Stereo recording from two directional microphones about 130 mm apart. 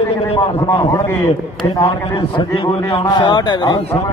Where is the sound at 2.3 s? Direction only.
40° left (ahead or behind).